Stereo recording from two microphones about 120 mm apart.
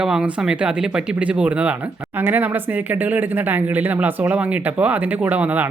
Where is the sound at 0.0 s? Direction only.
5° right (ahead or behind).